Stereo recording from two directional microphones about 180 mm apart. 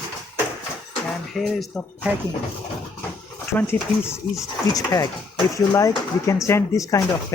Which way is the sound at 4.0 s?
15° left (ahead or behind).